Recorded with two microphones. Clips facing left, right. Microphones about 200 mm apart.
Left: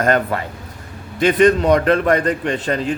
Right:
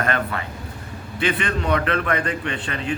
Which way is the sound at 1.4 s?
40° left (ahead or behind).